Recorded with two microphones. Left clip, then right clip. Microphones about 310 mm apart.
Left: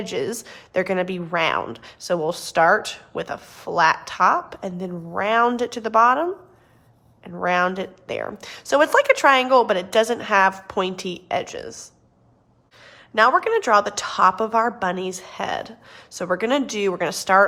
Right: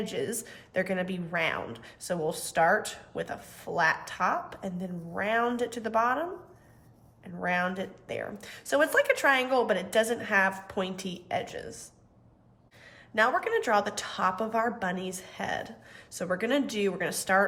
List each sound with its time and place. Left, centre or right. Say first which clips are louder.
0.1 s speech: left 7 dB; centre
7.3 s speech: left 9 dB; centre
13.1 s a woman's voice: left 9 dB; centre